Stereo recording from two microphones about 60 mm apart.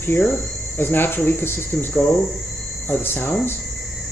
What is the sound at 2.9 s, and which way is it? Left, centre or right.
Speech, left.